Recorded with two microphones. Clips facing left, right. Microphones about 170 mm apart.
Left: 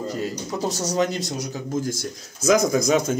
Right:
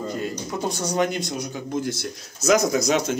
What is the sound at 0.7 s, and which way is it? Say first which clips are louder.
Speech: even; 35° left (ahead or behind).